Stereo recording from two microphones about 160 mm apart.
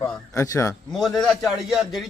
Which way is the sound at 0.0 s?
20° left (ahead or behind).